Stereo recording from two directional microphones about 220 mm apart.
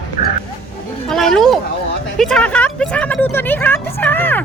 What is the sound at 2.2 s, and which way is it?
Speech, 5° left (ahead or behind).